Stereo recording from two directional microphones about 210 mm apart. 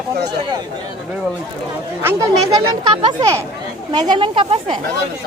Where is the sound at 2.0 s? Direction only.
10° right (ahead or behind).